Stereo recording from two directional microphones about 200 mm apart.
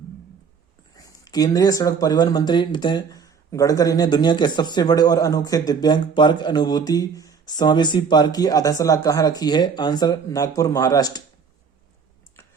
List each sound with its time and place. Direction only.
0.9 s speech: 20° left (ahead or behind)